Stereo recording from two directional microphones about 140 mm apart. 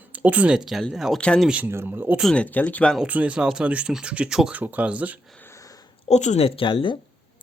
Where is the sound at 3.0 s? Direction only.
10° right (ahead or behind).